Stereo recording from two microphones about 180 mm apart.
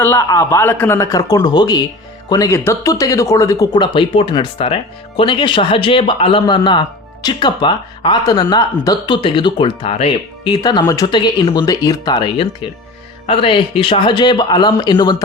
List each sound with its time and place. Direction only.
0.0 s a man's voice: 15° left (ahead or behind)